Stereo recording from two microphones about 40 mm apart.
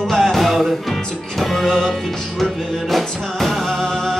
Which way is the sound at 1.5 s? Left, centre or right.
Centre.